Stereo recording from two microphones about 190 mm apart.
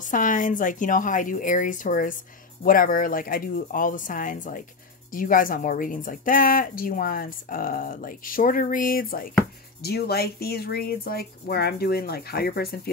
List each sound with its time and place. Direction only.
0.0 s speech: 45° left (ahead or behind)